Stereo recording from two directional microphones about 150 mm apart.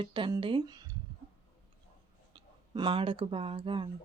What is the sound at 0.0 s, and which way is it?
Speech, 30° right (ahead or behind).